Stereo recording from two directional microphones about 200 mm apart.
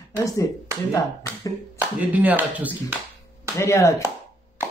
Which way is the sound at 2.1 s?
10° right (ahead or behind).